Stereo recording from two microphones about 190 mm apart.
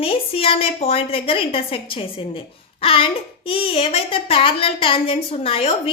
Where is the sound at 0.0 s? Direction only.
30° left (ahead or behind).